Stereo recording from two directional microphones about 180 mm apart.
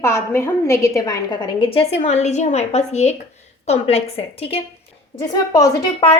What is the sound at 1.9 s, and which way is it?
A woman's voice, 40° left (ahead or behind).